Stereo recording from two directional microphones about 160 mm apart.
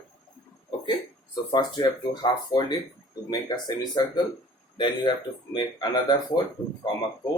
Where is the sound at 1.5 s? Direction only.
25° left (ahead or behind).